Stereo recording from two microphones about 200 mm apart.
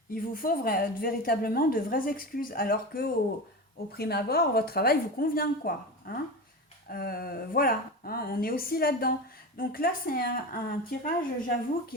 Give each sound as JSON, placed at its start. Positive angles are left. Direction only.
{"t": 0.1, "sound": "a woman's voice", "side_deg": 45}